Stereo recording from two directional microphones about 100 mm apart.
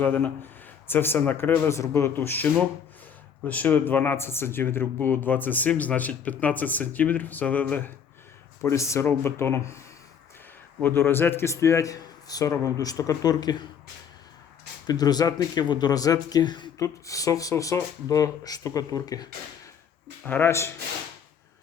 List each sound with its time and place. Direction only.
0.0 s speech: 20° left (ahead or behind)
8.6 s speech: 30° left (ahead or behind)
10.8 s speech: 25° left (ahead or behind); by 13.7 s 45° left (ahead or behind)
14.8 s speech: 40° left (ahead or behind)
16.8 s speech: 35° left (ahead or behind)
20.2 s speech: 20° left (ahead or behind)